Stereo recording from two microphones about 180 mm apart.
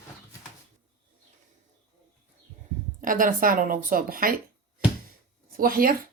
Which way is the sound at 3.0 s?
50° right (ahead or behind).